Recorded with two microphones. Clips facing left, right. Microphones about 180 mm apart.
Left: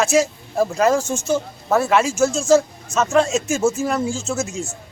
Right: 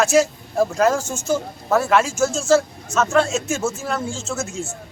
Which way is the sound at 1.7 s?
5° left (ahead or behind).